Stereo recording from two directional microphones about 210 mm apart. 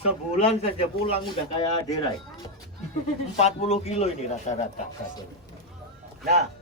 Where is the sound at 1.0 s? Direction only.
25° left (ahead or behind).